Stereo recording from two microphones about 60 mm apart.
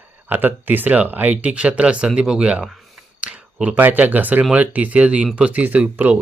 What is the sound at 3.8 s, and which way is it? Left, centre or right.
Speech, right.